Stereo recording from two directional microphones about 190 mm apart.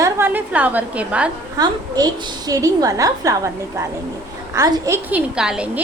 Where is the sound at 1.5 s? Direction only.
20° right (ahead or behind); by 5.8 s 5° right (ahead or behind).